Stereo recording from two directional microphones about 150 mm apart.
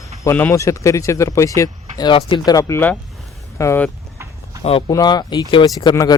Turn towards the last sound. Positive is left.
turn(degrees=25)  # may be behind; listen again after turning